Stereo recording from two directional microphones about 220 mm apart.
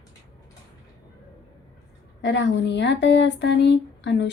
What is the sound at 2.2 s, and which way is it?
Speech, 55° left (ahead or behind).